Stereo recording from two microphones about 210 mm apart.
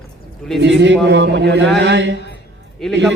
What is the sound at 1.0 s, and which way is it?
A man's voice, 55° right (ahead or behind).